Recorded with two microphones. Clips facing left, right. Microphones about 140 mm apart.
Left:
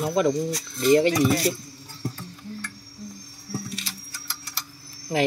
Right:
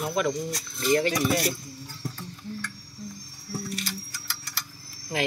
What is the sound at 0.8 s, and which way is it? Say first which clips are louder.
Speech: left 5 dB; 25° left (ahead or behind).